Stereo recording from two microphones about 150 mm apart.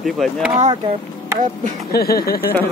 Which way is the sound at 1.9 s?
90° left.